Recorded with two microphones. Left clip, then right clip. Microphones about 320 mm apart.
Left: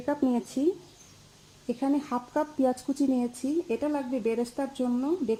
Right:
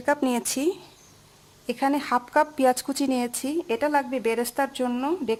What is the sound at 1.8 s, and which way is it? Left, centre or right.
A woman's voice, right.